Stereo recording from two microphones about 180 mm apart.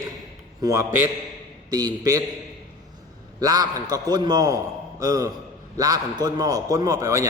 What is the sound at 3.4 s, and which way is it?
A man's voice, 20° right (ahead or behind).